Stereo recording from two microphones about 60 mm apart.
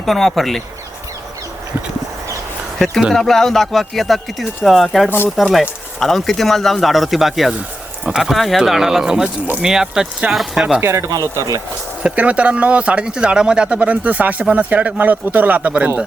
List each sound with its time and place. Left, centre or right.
0.0 s speech: centre
2.7 s a sound: centre
3.2 s speech: centre
10.8 s speech: right
11.3 s speech: right
12.0 s speech: right